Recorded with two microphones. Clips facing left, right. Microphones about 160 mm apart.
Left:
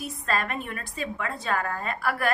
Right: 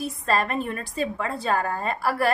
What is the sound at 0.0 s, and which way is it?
A woman's voice, 30° right (ahead or behind).